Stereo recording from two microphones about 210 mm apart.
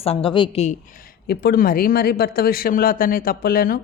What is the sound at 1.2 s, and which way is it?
Speech, 50° left (ahead or behind).